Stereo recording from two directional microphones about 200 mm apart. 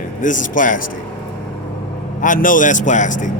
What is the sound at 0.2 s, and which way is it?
Speech, 40° left (ahead or behind).